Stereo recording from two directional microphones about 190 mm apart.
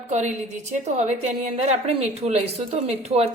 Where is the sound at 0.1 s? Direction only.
35° right (ahead or behind).